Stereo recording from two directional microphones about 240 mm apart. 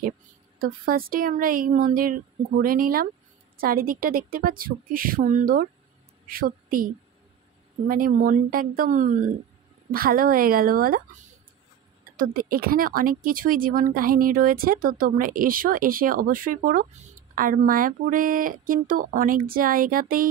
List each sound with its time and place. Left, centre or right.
0.6 s a woman's voice: right
7.9 s speech: right
12.2 s speech: right